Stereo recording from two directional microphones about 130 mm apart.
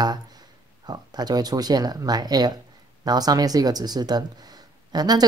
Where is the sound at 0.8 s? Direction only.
30° right (ahead or behind).